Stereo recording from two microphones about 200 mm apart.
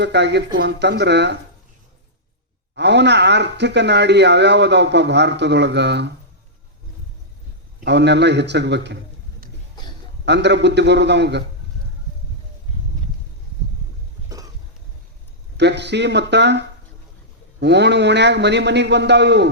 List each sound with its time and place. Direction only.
0.0 s speech: 60° right (ahead or behind)
2.7 s speech: 60° right (ahead or behind)
7.9 s speech: 60° right (ahead or behind)
10.2 s speech: 60° right (ahead or behind)
14.3 s a sound: 15° right (ahead or behind)
15.5 s speech: 60° right (ahead or behind)